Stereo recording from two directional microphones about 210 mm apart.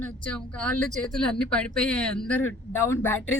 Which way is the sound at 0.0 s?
5° left (ahead or behind).